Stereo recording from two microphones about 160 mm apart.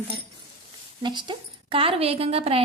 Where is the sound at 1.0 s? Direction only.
30° right (ahead or behind).